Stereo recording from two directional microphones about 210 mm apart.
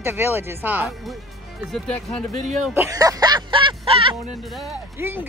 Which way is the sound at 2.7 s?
10° right (ahead or behind).